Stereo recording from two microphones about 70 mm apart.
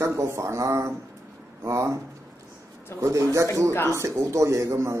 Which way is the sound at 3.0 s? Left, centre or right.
Right.